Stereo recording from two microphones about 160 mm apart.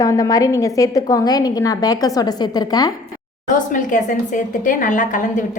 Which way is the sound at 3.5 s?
55° left (ahead or behind).